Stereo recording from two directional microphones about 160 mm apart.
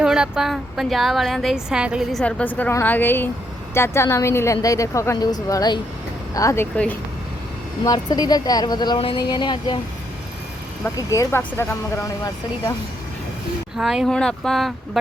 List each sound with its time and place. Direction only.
0.0 s a woman's voice: 5° right (ahead or behind); by 6.7 s 20° left (ahead or behind)
7.9 s a woman's voice: 25° left (ahead or behind)
10.9 s a woman's voice: 20° left (ahead or behind)
13.7 s speech: 5° right (ahead or behind)